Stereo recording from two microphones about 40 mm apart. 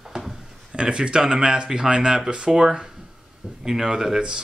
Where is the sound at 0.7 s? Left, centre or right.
Right.